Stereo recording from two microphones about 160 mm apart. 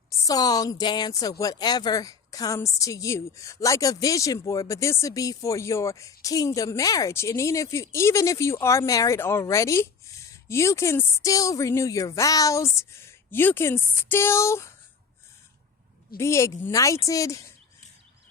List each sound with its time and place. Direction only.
0.1 s speech: 25° left (ahead or behind)
16.1 s speech: 15° left (ahead or behind)